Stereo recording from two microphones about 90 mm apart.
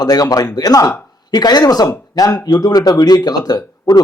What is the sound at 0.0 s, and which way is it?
A man's voice, 45° left (ahead or behind).